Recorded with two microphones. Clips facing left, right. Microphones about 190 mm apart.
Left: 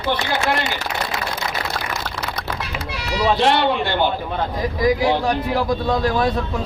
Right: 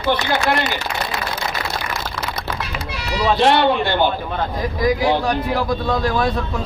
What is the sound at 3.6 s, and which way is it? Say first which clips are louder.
Speech: right 2 dB; 50° right (ahead or behind).